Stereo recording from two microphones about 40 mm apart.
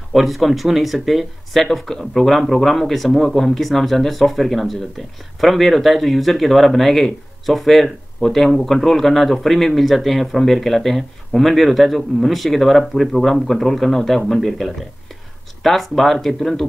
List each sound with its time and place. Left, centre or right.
0.1 s speech: centre